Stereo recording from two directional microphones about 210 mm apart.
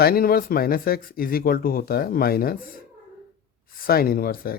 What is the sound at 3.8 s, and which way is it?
Speech, 45° left (ahead or behind).